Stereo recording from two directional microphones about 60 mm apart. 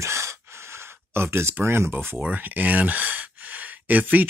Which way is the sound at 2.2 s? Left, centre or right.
Right.